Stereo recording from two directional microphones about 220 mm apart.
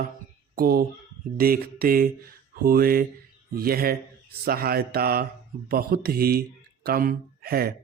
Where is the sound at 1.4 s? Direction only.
40° right (ahead or behind).